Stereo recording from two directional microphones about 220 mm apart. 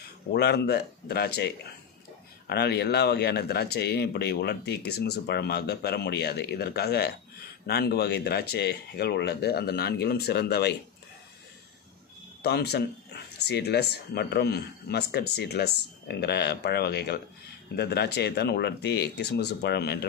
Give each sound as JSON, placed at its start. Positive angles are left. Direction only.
{"t": 0.3, "sound": "speech", "side_deg": 45}
{"t": 12.4, "sound": "speech", "side_deg": 45}